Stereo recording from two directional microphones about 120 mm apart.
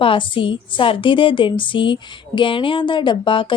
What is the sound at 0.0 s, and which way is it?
A woman's voice, 45° left (ahead or behind).